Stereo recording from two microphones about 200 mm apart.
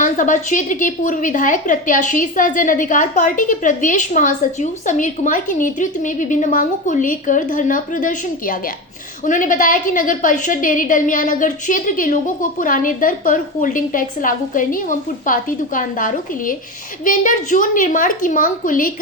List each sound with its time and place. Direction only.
0.0 s a woman's voice: 40° left (ahead or behind)